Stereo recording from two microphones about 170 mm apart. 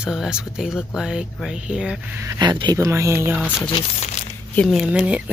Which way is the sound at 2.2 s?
25° right (ahead or behind).